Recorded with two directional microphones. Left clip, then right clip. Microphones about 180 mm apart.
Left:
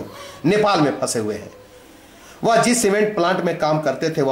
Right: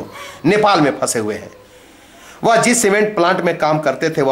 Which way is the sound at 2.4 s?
5° left (ahead or behind).